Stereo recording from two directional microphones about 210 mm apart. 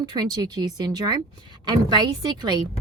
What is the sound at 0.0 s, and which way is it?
Speech, 20° right (ahead or behind).